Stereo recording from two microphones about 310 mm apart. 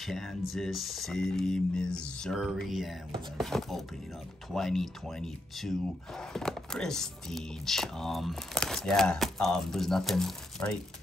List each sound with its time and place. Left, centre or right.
0.0 s speech: centre